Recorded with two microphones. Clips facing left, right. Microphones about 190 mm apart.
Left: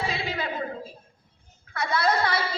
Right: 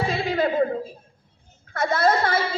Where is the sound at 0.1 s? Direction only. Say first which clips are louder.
Right 8 dB; 50° right (ahead or behind).